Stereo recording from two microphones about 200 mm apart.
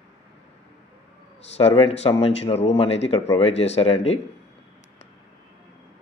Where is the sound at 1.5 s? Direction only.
30° left (ahead or behind).